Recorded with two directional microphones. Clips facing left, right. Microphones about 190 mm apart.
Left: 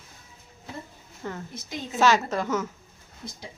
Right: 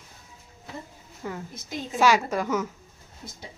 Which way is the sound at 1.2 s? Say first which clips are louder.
Even; 10° right (ahead or behind).